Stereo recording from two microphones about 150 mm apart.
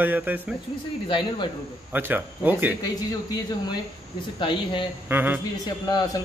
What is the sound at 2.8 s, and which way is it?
A man's voice, 25° left (ahead or behind).